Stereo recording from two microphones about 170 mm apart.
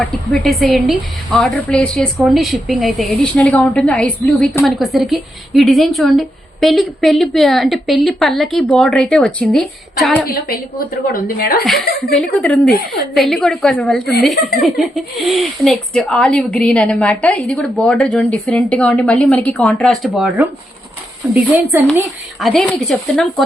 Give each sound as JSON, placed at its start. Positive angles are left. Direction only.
{"t": 0.0, "sound": "a woman's voice", "side_deg": 0}
{"t": 10.2, "sound": "a woman's voice", "side_deg": 60}
{"t": 11.6, "sound": "a woman's voice", "side_deg": 0}
{"t": 22.4, "sound": "a woman's voice", "side_deg": 0}